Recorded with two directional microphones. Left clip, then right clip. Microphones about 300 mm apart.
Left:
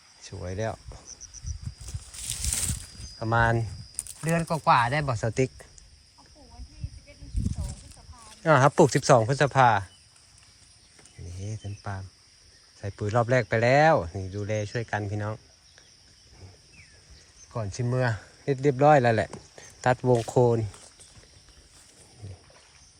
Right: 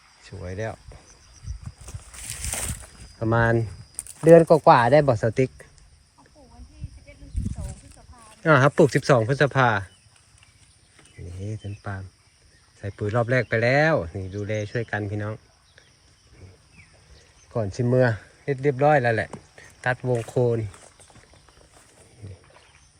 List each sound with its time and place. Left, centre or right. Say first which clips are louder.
0.3 s speech: even; centre
2.2 s a sound: left 2 dB; centre
3.2 s speech: right 2 dB; centre
8.4 s speech: right 2 dB; centre
11.3 s a sound: right 4 dB; centre
12.8 s speech: right 1 dB; centre
17.5 s speech: right 8 dB; centre
18.4 s speech: even; centre
19.5 s a sound: left 1 dB; centre
20.3 s speech: right 1 dB; centre